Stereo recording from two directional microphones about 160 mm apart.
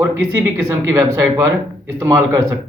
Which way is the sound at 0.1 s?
15° right (ahead or behind).